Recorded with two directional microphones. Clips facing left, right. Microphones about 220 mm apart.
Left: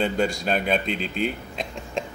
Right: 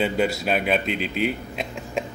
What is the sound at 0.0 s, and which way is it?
A man's voice, 5° right (ahead or behind).